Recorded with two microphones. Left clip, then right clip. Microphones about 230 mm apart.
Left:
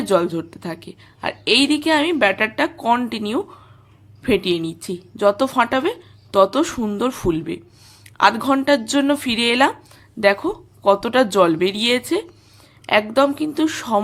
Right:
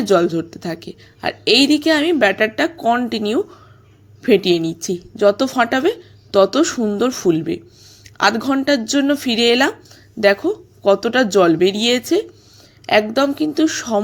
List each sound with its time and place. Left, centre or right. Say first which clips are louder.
0.0 s a woman's voice: right 3 dB; centre